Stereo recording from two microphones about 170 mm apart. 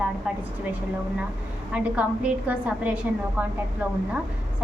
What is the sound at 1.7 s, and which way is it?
A woman's voice, 5° right (ahead or behind).